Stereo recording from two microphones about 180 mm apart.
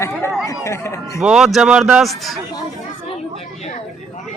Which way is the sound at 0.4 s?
15° left (ahead or behind).